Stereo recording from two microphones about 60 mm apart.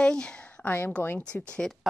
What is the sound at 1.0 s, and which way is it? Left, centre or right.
Speech, right.